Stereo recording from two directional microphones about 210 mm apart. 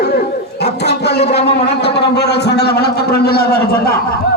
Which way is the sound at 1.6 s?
55° left (ahead or behind).